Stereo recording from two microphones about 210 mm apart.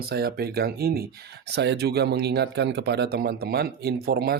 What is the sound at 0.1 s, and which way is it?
Speech, 50° right (ahead or behind).